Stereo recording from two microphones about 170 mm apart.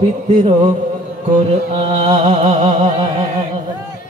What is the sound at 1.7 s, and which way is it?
Music, 35° right (ahead or behind).